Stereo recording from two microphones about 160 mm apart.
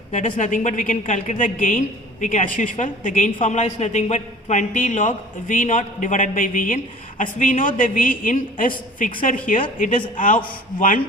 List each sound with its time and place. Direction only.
0.1 s a man's voice: 50° left (ahead or behind)
3.4 s a man's voice: 45° left (ahead or behind)